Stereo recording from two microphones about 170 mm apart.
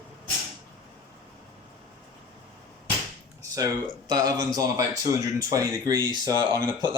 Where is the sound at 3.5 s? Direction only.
20° right (ahead or behind).